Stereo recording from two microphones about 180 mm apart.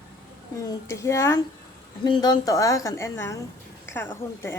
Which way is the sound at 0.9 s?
15° left (ahead or behind).